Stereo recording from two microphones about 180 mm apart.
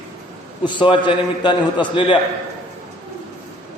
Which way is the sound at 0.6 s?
25° left (ahead or behind).